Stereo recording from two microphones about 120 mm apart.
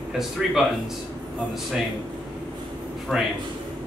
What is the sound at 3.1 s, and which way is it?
Speech, 5° right (ahead or behind).